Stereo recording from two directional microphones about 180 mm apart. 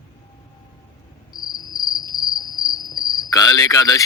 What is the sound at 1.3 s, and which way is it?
Cricket, 20° left (ahead or behind).